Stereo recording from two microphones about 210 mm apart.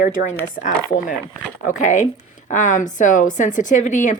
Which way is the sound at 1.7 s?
35° left (ahead or behind).